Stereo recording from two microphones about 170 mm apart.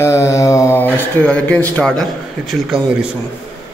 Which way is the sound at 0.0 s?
15° left (ahead or behind).